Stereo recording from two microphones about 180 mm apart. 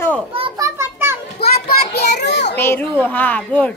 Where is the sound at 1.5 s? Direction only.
60° left (ahead or behind).